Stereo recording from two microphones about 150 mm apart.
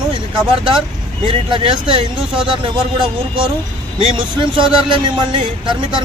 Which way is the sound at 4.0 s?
35° right (ahead or behind).